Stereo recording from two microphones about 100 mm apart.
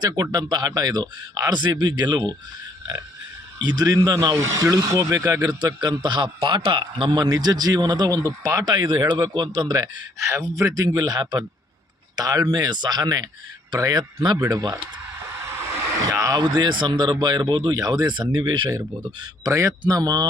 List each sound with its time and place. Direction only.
0.0 s a man's voice: 40° right (ahead or behind)
3.6 s a man's voice: 45° right (ahead or behind)
8.6 s a man's voice: 45° right (ahead or behind)
15.3 s speech: 25° right (ahead or behind); by 18.8 s 50° right (ahead or behind)
19.5 s a man's voice: 35° right (ahead or behind)